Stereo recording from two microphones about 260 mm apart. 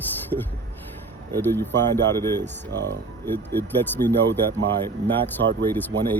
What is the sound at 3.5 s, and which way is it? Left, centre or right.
Speech, centre.